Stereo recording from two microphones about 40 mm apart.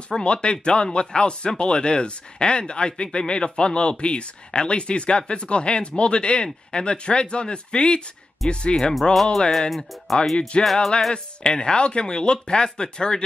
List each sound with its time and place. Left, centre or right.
0.1 s speech: left
8.4 s speech: centre
10.3 s speech: left
10.6 s speech: centre
11.4 s speech: centre